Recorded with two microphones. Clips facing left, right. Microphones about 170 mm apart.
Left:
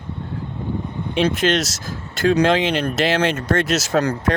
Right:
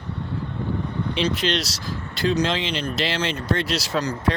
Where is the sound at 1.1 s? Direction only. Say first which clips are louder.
Left 6 dB; 50° left (ahead or behind).